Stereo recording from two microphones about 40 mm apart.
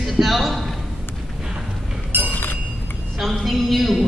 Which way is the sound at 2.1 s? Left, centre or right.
Right.